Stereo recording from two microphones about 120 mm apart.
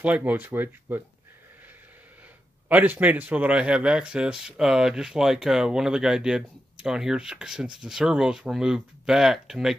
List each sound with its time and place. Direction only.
0.0 s speech: 10° right (ahead or behind)
2.7 s a man's voice: 15° right (ahead or behind)